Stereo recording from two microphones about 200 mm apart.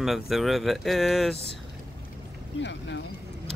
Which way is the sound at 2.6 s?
65° left (ahead or behind).